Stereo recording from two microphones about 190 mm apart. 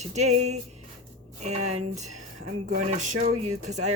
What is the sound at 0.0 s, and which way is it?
Speech, 35° right (ahead or behind).